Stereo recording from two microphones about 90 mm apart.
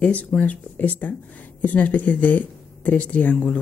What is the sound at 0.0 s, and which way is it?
Speech, 15° left (ahead or behind).